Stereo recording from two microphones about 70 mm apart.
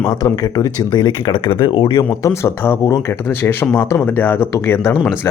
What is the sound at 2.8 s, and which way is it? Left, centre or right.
Speech, left.